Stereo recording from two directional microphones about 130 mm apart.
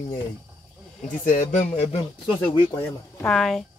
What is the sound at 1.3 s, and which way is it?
Speech, 80° left.